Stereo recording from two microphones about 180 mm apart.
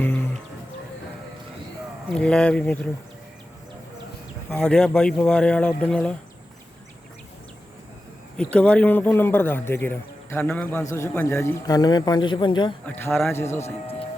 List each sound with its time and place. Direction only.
2.1 s speech: 5° left (ahead or behind)
4.4 s speech: 5° left (ahead or behind)
8.4 s a man's voice: 10° left (ahead or behind); by 12.7 s 25° left (ahead or behind)
12.8 s a man's voice: 15° left (ahead or behind)